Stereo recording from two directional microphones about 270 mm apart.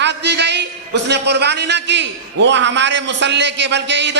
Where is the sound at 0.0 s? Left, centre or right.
Right.